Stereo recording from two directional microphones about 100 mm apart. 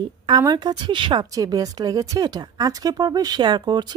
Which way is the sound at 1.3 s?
40° right (ahead or behind).